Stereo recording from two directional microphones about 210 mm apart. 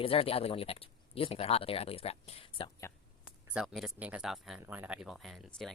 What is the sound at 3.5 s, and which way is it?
Speech, 5° right (ahead or behind).